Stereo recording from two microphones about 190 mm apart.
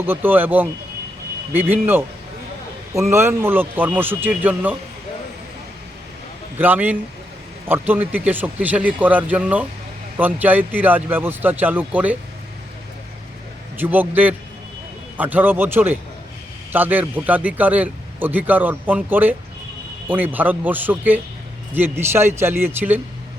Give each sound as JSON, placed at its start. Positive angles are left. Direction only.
{"t": 0.0, "sound": "a man's voice", "side_deg": -10}
{"t": 6.6, "sound": "a man's voice", "side_deg": -10}
{"t": 13.7, "sound": "a man's voice", "side_deg": -10}